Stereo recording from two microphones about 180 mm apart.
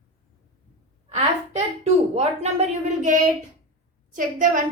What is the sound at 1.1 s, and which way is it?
A woman's voice, 35° right (ahead or behind).